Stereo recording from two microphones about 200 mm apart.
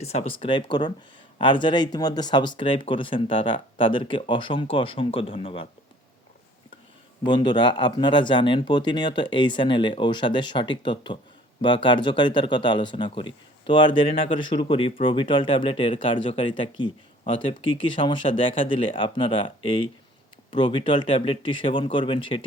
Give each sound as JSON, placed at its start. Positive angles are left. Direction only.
{"t": 0.0, "sound": "speech", "side_deg": 30}
{"t": 7.3, "sound": "speech", "side_deg": 25}